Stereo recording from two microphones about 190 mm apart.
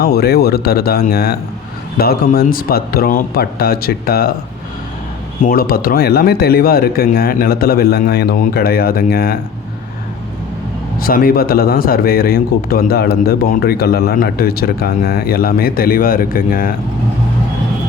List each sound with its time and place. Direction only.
0.0 s a man's voice: 55° left (ahead or behind)
5.4 s a man's voice: 50° left (ahead or behind)
11.0 s a man's voice: 50° left (ahead or behind)